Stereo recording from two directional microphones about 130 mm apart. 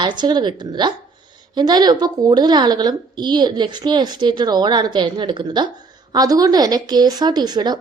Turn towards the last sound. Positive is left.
turn(degrees=-30)  # may be behind; listen again after turning